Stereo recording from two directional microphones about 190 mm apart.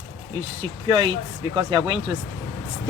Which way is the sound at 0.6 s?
25° right (ahead or behind).